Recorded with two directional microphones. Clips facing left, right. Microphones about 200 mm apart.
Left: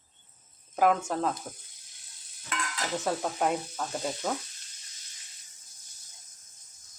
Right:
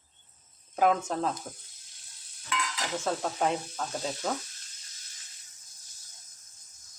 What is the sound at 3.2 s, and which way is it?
Speech, 5° left (ahead or behind).